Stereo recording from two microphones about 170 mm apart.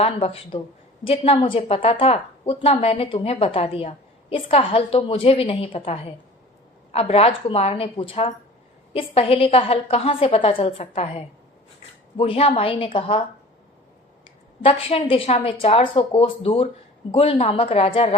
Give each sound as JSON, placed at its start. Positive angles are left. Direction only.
{"t": 0.0, "sound": "a woman's voice", "side_deg": 35}
{"t": 14.6, "sound": "a woman's voice", "side_deg": 35}